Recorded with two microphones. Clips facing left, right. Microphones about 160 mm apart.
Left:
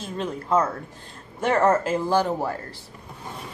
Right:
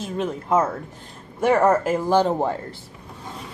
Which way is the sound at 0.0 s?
20° right (ahead or behind).